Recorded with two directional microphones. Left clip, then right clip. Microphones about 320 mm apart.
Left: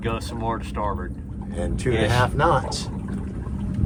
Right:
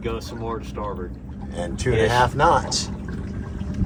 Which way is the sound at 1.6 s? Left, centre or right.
Centre.